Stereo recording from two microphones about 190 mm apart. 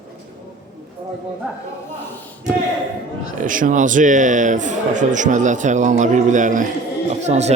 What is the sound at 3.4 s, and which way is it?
A man's voice, 45° right (ahead or behind).